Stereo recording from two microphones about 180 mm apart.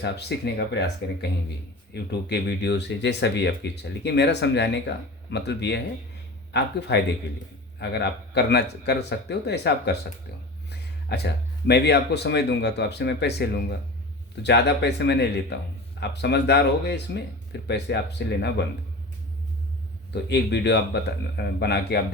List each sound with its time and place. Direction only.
0.0 s speech: 65° left (ahead or behind)
10.7 s a sound: 70° left (ahead or behind)
11.7 s speech: 65° left (ahead or behind)
20.2 s speech: 70° left (ahead or behind)